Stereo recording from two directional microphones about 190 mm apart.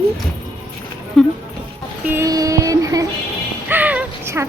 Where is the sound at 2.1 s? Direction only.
15° right (ahead or behind).